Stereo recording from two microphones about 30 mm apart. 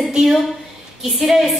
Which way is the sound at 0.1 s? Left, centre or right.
Centre.